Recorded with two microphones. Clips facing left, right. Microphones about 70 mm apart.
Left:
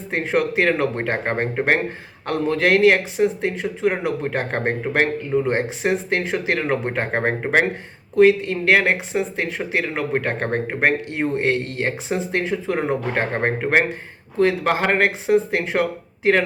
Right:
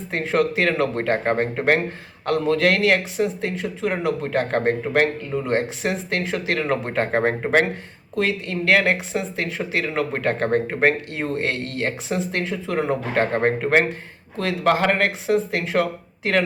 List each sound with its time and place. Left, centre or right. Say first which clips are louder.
0.1 s a man's voice: even; left